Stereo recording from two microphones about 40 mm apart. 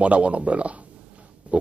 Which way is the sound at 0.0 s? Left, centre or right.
Right.